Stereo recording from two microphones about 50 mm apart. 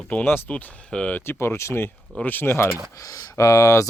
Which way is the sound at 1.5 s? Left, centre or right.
Left.